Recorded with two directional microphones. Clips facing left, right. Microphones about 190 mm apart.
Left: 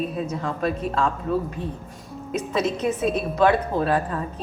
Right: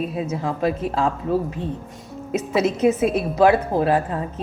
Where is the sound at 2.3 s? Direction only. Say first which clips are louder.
Right 3 dB; 25° right (ahead or behind).